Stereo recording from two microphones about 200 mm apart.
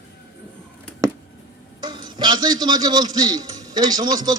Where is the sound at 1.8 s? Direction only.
20° right (ahead or behind).